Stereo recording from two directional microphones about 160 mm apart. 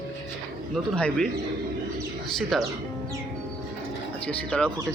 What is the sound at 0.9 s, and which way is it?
Speech, 5° left (ahead or behind).